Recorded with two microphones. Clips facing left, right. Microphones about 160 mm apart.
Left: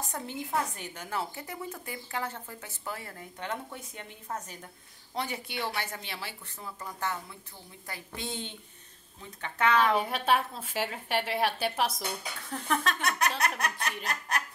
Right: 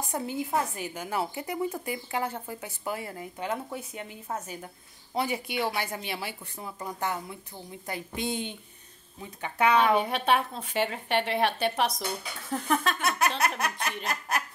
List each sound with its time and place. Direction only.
0.0 s a woman's voice: 10° right (ahead or behind)
9.8 s speech: centre (ahead or behind)